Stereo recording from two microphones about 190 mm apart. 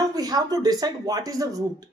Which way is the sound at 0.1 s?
20° right (ahead or behind).